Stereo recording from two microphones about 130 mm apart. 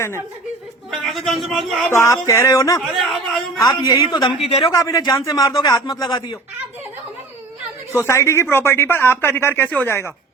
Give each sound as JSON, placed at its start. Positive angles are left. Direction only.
{"t": 0.9, "sound": "a man's voice", "side_deg": 0}
{"t": 1.9, "sound": "speech", "side_deg": 20}
{"t": 2.8, "sound": "a man's voice", "side_deg": 0}
{"t": 3.6, "sound": "speech", "side_deg": 25}
{"t": 4.4, "sound": "a man's voice", "side_deg": 50}
{"t": 4.6, "sound": "speech", "side_deg": 30}
{"t": 7.9, "sound": "speech", "side_deg": 20}